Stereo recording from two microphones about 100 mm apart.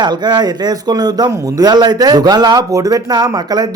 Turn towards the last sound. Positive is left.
turn(degrees=-40)  # may be behind; listen again after turning